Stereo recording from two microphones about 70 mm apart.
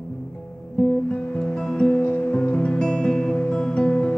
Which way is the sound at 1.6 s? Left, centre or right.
Centre.